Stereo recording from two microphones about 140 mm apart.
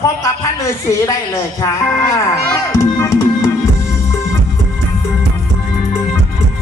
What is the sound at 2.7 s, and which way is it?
Music, 20° left (ahead or behind).